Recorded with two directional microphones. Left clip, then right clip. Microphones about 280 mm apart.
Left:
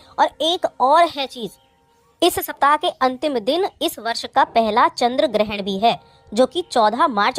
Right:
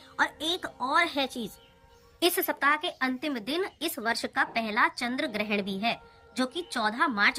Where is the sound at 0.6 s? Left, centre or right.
Left.